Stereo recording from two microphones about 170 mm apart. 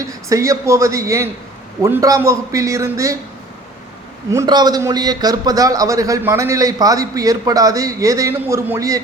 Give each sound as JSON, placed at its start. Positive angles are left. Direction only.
{"t": 0.0, "sound": "a man's voice", "side_deg": -20}
{"t": 4.3, "sound": "a man's voice", "side_deg": -20}